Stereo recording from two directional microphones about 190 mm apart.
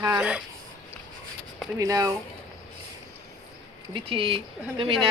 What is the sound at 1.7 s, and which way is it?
Speech, 15° right (ahead or behind).